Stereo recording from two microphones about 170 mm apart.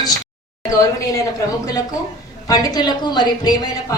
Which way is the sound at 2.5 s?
25° left (ahead or behind).